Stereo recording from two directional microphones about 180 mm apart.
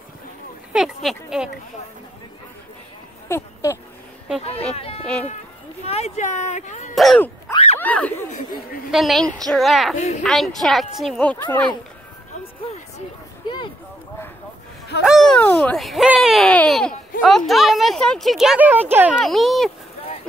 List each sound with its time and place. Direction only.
0.7 s speech: 5° right (ahead or behind)
3.3 s a sound: 15° left (ahead or behind)
4.7 s speech: 35° left (ahead or behind)
5.0 s speech: 5° left (ahead or behind)
5.9 s speech: 35° left (ahead or behind)
7.5 s a sound: 35° left (ahead or behind)
7.8 s speech: 10° left (ahead or behind)
8.3 s speech: 50° left (ahead or behind)
8.9 s speech: centre (ahead or behind)
15.0 s speech: centre (ahead or behind)
17.1 s a sound: 50° left (ahead or behind)
17.5 s speech: centre (ahead or behind)
19.2 s speech: centre (ahead or behind)